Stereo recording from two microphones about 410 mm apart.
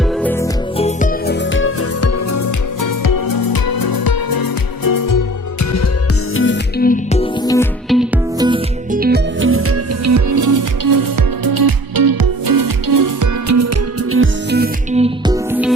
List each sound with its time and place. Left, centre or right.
0.8 s music: centre
1.5 s music: left
2.8 s music: left
6.3 s music: left; by 13.6 s right
14.1 s music: right